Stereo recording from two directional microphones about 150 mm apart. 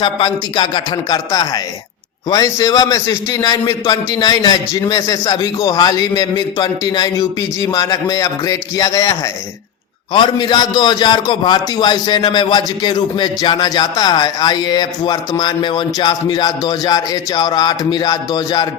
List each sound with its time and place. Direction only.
0.0 s a man's voice: 30° left (ahead or behind)
10.1 s a man's voice: 30° left (ahead or behind)